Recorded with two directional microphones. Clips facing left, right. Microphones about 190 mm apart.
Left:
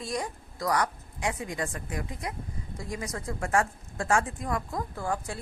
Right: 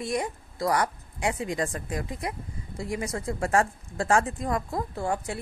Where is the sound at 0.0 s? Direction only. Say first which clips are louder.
Right 4 dB; 25° right (ahead or behind).